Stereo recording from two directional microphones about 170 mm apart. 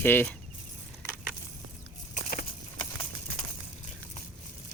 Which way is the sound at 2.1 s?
55° left (ahead or behind).